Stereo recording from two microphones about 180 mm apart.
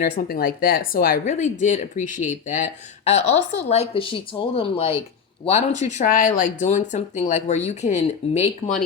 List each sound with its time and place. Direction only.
0.0 s speech: 60° left (ahead or behind); by 8.8 s 40° left (ahead or behind)